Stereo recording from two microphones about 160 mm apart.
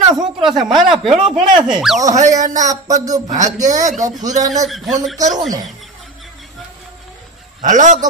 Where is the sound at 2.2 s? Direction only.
50° right (ahead or behind).